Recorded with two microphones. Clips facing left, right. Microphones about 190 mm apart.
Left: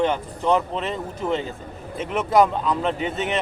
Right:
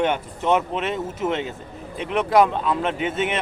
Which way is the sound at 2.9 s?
40° left (ahead or behind).